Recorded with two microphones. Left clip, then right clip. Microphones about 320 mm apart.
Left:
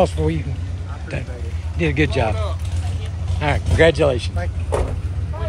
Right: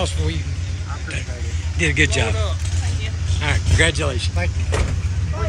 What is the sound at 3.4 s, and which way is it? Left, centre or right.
Speech, centre.